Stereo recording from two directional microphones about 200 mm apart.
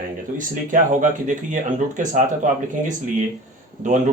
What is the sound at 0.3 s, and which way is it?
Speech, 40° right (ahead or behind).